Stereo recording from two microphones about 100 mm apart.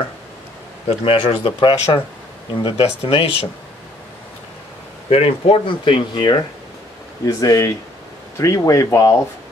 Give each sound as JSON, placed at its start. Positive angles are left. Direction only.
{"t": 0.8, "sound": "speech", "side_deg": 70}
{"t": 5.1, "sound": "speech", "side_deg": 70}
{"t": 7.2, "sound": "speech", "side_deg": 35}